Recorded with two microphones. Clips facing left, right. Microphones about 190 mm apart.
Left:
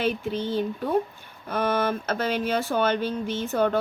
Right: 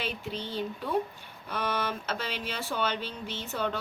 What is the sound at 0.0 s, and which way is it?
A woman's voice, 50° left (ahead or behind).